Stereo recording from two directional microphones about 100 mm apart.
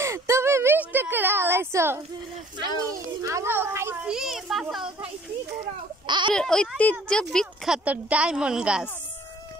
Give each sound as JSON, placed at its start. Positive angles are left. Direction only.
{"t": 0.0, "sound": "a sound", "side_deg": -30}
{"t": 3.2, "sound": "a woman's voice", "side_deg": -30}
{"t": 4.0, "sound": "a child's voice", "side_deg": -5}
{"t": 6.0, "sound": "a sound", "side_deg": -50}
{"t": 6.3, "sound": "speech", "side_deg": 5}
{"t": 7.2, "sound": "speech", "side_deg": -5}